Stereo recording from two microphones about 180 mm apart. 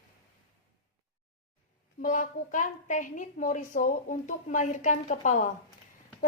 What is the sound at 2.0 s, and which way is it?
A woman's voice, 45° left (ahead or behind).